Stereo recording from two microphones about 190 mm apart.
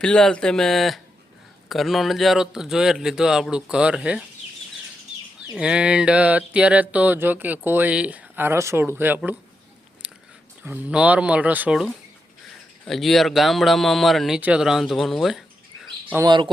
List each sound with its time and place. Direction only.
0.0 s a man's voice: 5° left (ahead or behind)
5.5 s a sound: 5° right (ahead or behind)
10.0 s whispering: 5° right (ahead or behind)
10.6 s a sound: 10° right (ahead or behind)
12.8 s speech: centre (ahead or behind)
16.1 s speech: 20° right (ahead or behind)